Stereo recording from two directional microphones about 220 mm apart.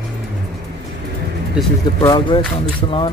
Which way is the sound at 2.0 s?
20° left (ahead or behind).